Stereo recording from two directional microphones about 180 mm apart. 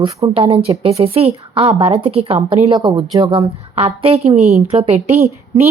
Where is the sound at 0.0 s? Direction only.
30° right (ahead or behind).